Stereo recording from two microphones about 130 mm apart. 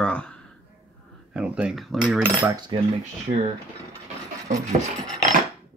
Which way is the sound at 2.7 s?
40° right (ahead or behind).